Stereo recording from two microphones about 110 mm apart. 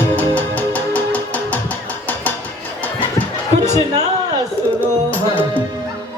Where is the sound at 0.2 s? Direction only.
15° left (ahead or behind).